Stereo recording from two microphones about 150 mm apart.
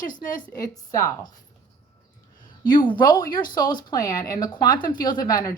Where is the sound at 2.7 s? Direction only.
30° left (ahead or behind).